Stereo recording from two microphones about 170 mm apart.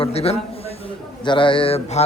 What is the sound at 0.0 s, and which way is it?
A man's voice, 35° left (ahead or behind).